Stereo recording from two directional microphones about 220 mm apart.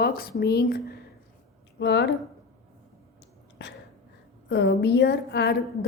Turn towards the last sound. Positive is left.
turn(degrees=50)  # may be behind; listen again after turning